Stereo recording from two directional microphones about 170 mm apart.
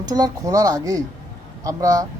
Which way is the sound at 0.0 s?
20° right (ahead or behind).